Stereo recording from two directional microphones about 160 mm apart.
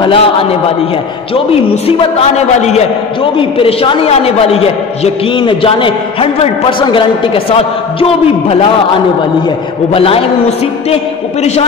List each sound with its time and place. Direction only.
0.0 s a man's voice: 35° left (ahead or behind)
9.9 s a man's voice: 35° left (ahead or behind)